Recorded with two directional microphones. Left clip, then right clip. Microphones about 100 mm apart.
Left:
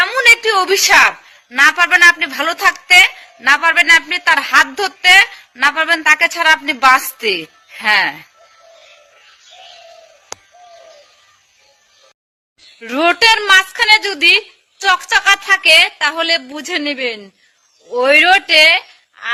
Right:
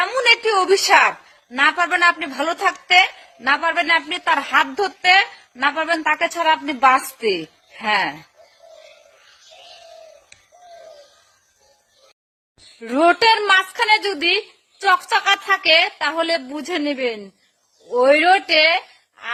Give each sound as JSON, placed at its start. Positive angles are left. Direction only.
{"t": 0.0, "sound": "a sound", "side_deg": -35}
{"t": 0.7, "sound": "a man's voice", "side_deg": -35}
{"t": 12.8, "sound": "a woman's voice", "side_deg": -20}